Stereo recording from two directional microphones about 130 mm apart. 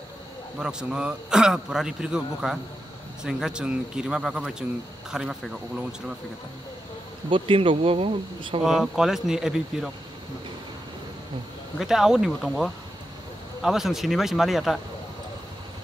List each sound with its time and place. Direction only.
0.6 s a man's voice: 5° right (ahead or behind)
7.2 s speech: 40° right (ahead or behind)
8.6 s a man's voice: 5° right (ahead or behind)
11.8 s a man's voice: 5° right (ahead or behind)